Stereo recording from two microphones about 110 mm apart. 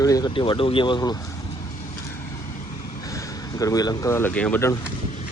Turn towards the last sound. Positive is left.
turn(degrees=10)  # may be behind; listen again after turning